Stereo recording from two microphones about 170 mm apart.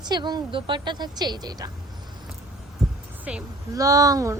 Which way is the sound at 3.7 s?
20° right (ahead or behind).